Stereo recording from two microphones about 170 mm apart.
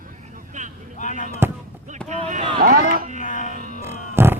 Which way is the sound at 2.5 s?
60° right (ahead or behind).